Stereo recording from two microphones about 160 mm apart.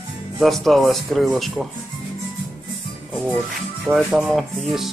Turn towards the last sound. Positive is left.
turn(degrees=0)  # may be behind; listen again after turning